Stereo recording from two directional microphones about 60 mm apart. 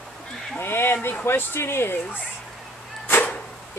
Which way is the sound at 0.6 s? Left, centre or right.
Left.